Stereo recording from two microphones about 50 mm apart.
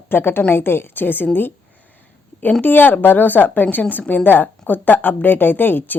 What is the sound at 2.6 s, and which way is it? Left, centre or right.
A woman's voice, left.